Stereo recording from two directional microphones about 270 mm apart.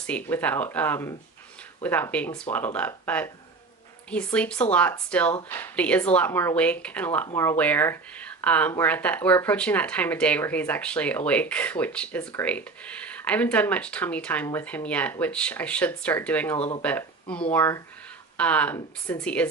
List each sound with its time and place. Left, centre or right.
0.0 s speech: centre
16.6 s speech: left
16.8 s speech: centre